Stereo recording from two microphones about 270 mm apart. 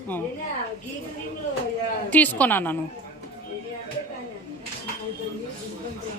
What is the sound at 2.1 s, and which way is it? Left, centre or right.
Speech, centre.